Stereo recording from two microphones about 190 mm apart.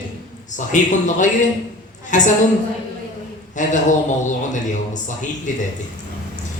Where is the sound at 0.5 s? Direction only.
40° left (ahead or behind).